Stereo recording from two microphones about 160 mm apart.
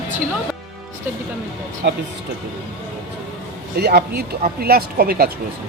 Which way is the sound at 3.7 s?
90° right.